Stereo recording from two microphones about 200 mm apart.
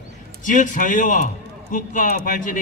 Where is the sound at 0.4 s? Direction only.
40° left (ahead or behind).